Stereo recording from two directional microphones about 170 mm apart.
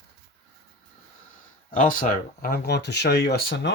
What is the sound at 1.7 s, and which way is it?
Speech, 50° left (ahead or behind).